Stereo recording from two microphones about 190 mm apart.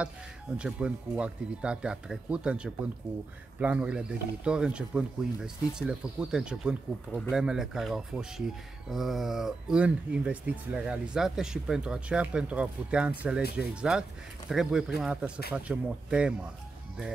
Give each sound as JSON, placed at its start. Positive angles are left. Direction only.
{"t": 0.6, "sound": "speech", "side_deg": -5}
{"t": 13.4, "sound": "speech", "side_deg": 55}
{"t": 13.7, "sound": "speech", "side_deg": -5}